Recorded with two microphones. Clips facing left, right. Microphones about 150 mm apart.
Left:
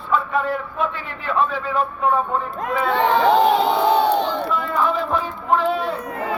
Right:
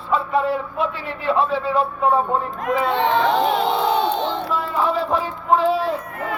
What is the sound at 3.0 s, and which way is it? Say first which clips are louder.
Speech: left 3 dB; 20° right (ahead or behind).